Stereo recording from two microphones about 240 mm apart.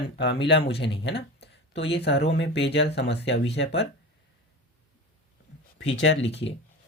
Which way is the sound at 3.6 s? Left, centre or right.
Left.